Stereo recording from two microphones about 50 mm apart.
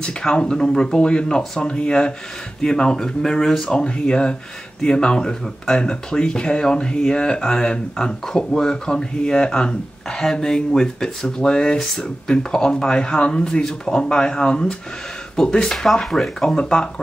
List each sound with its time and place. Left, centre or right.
0.0 s speech: centre